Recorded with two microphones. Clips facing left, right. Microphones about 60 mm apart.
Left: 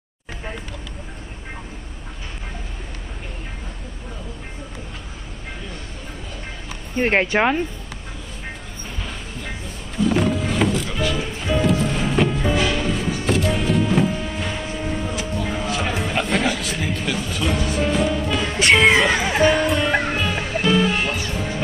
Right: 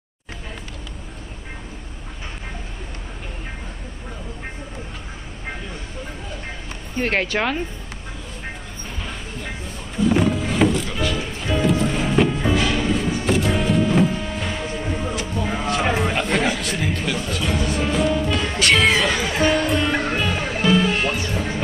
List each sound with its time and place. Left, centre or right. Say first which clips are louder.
7.0 s speech: left 3 dB; left
9.0 s a sound: right 1 dB; centre
18.8 s music: left 3 dB; centre